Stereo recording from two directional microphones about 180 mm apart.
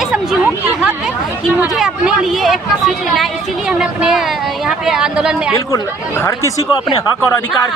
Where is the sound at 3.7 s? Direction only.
5° right (ahead or behind).